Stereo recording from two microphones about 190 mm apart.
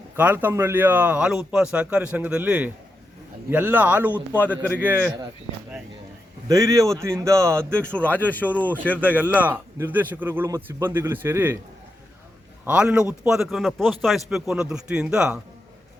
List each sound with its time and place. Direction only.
0.2 s speech: 10° right (ahead or behind)
6.5 s speech: 15° right (ahead or behind)
7.9 s speech: 10° left (ahead or behind)
9.3 s speech: 10° right (ahead or behind)
12.6 s a man's voice: 5° right (ahead or behind)